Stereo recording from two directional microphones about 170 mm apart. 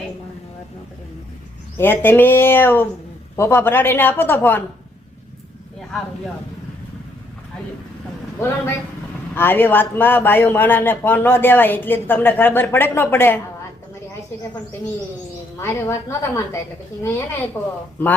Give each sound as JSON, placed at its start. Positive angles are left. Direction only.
{"t": 1.8, "sound": "a man's voice", "side_deg": 10}
{"t": 8.4, "sound": "a man's voice", "side_deg": 15}
{"t": 15.5, "sound": "a man's voice", "side_deg": 15}